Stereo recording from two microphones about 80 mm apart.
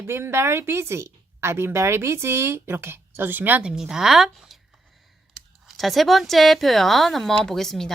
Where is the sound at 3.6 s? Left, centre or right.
Centre.